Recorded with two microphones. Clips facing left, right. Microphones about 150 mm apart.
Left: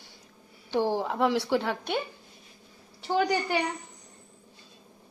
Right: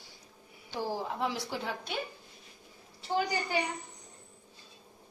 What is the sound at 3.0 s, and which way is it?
Speech, 75° left (ahead or behind).